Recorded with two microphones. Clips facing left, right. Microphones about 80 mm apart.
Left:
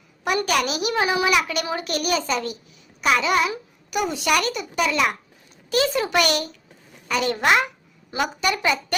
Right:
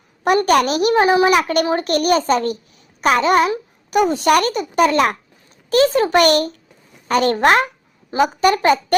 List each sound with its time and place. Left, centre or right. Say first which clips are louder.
0.3 s a child's voice: right 8 dB; right